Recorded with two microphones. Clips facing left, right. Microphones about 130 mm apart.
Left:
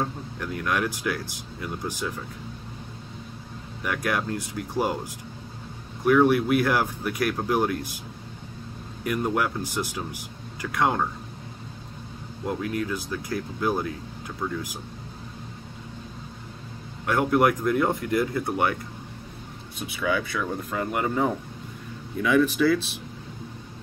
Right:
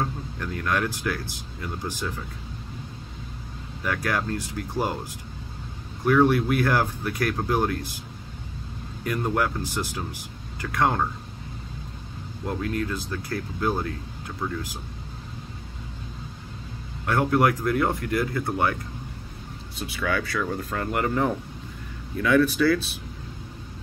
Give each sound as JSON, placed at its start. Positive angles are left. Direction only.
{"t": 0.0, "sound": "speech", "side_deg": 10}
{"t": 3.8, "sound": "speech", "side_deg": 10}
{"t": 6.0, "sound": "speech", "side_deg": 10}
{"t": 9.0, "sound": "speech", "side_deg": 10}
{"t": 12.5, "sound": "speech", "side_deg": 10}
{"t": 14.4, "sound": "speech", "side_deg": -5}
{"t": 17.0, "sound": "speech", "side_deg": 10}
{"t": 20.0, "sound": "speech", "side_deg": 10}